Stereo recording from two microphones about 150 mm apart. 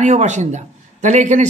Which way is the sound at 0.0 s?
50° right (ahead or behind).